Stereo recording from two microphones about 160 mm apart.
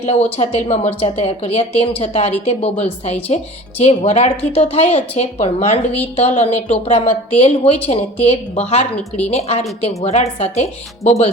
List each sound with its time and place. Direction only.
0.0 s speech: 40° left (ahead or behind)